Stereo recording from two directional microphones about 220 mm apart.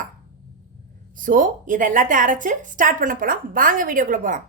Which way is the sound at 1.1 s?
35° right (ahead or behind).